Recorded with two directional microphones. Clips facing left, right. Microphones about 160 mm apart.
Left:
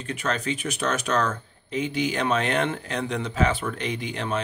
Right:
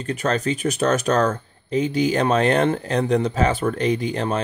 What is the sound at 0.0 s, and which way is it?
Speech, 40° right (ahead or behind).